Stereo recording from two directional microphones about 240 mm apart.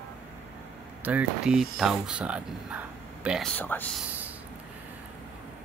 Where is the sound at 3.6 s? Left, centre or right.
Centre.